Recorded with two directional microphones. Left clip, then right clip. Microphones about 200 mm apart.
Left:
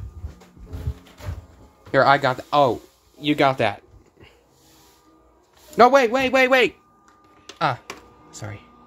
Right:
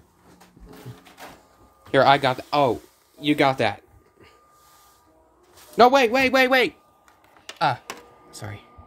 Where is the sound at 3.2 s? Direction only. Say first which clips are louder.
Left 1 dB; 5° right (ahead or behind).